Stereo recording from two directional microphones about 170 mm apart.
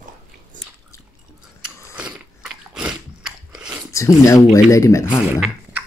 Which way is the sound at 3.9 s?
20° left (ahead or behind).